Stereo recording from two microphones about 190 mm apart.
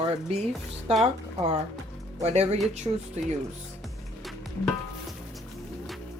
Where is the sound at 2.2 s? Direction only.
35° right (ahead or behind).